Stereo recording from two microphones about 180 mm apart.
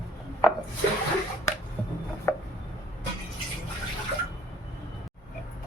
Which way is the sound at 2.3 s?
15° left (ahead or behind).